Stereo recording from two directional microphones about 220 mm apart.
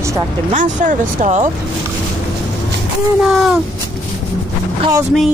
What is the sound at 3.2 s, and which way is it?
Speech, centre (ahead or behind).